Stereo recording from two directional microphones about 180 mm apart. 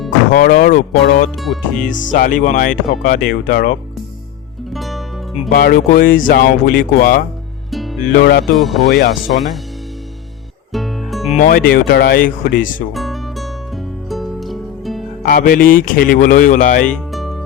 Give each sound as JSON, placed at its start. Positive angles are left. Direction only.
{"t": 0.3, "sound": "speech", "side_deg": 50}
{"t": 1.4, "sound": "speech", "side_deg": 0}
{"t": 1.9, "sound": "speech", "side_deg": 50}
{"t": 4.7, "sound": "music", "side_deg": 0}
{"t": 5.5, "sound": "speech", "side_deg": 55}
{"t": 7.7, "sound": "music", "side_deg": 0}
{"t": 8.1, "sound": "speech", "side_deg": 60}
{"t": 8.5, "sound": "speech", "side_deg": 0}
{"t": 8.9, "sound": "speech", "side_deg": 60}
{"t": 10.7, "sound": "music", "side_deg": 0}
{"t": 11.3, "sound": "speech", "side_deg": 50}
{"t": 12.9, "sound": "music", "side_deg": 0}
{"t": 15.2, "sound": "speech", "side_deg": 50}
{"t": 16.9, "sound": "music", "side_deg": 0}